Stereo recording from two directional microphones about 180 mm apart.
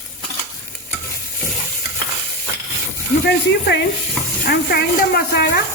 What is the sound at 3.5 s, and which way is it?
A woman's voice, 70° left (ahead or behind).